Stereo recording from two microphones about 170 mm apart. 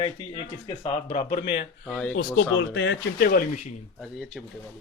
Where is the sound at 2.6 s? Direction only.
90° left; by 3.4 s 70° left (ahead or behind).